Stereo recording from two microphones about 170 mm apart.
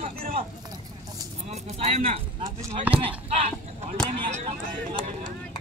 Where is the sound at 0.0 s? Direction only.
45° right (ahead or behind).